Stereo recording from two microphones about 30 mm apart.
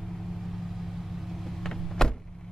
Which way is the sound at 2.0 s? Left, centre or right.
Left.